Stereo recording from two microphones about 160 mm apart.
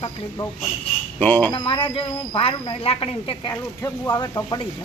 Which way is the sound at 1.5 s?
30° left (ahead or behind).